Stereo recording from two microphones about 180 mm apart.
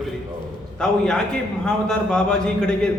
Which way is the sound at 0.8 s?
5° left (ahead or behind).